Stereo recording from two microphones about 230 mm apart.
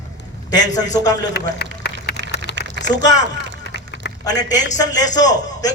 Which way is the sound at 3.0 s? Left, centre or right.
Centre.